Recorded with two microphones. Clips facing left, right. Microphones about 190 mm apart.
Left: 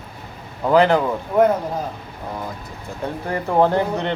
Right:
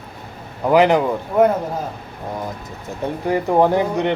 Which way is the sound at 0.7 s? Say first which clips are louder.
Right 1 dB; 15° right (ahead or behind).